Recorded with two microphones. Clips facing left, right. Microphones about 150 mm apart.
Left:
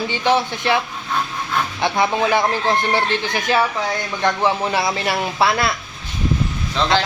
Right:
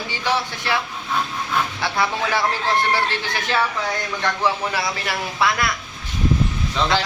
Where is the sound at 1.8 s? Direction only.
20° left (ahead or behind).